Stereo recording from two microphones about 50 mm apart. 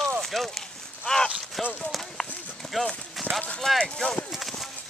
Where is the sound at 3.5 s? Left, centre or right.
Centre.